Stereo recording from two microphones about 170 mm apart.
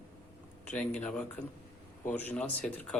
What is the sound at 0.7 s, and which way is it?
A man's voice, 10° left (ahead or behind).